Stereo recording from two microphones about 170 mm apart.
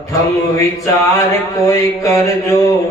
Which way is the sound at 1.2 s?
20° left (ahead or behind).